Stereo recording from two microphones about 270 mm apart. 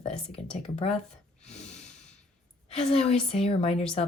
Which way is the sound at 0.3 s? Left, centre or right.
Left.